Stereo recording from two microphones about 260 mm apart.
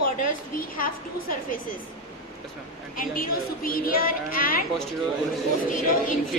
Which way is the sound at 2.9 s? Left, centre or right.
Left.